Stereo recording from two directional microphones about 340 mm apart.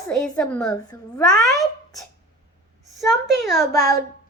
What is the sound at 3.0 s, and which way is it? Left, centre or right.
Speech, centre.